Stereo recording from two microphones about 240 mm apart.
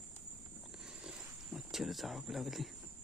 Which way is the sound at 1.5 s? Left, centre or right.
Centre.